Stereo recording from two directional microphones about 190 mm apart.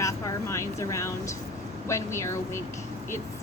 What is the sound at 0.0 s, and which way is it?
A woman's voice, 15° left (ahead or behind).